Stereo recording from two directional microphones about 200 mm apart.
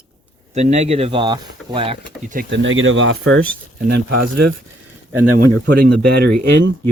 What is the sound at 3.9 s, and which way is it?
Speech, 55° right (ahead or behind).